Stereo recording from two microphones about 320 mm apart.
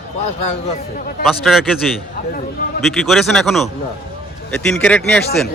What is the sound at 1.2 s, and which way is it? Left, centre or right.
Speech, centre.